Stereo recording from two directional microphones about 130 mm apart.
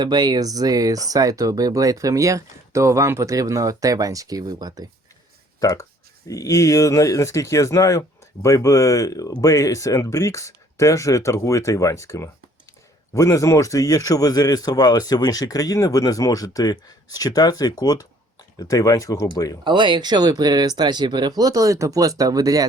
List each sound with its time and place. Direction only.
0.0 s speech: 35° right (ahead or behind)
5.5 s speech: 25° left (ahead or behind)
19.6 s speech: 35° right (ahead or behind)